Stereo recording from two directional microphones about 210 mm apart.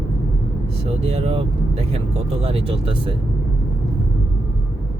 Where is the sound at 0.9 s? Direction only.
30° right (ahead or behind).